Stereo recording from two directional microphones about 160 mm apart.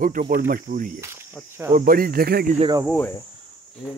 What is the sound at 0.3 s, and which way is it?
Speech, 60° right (ahead or behind).